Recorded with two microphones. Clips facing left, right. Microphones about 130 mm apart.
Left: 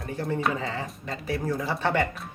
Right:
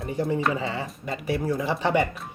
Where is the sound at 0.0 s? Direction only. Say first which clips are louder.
Right 3 dB; 15° right (ahead or behind).